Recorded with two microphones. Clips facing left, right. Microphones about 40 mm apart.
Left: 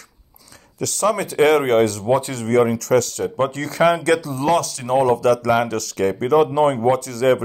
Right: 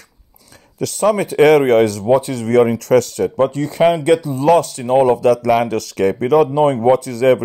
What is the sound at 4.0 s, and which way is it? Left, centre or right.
Speech, left.